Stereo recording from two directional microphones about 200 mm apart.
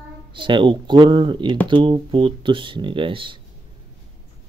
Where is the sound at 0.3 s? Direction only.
25° right (ahead or behind).